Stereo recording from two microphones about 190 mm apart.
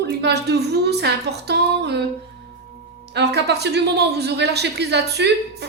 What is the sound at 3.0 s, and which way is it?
A woman's voice, 60° right (ahead or behind).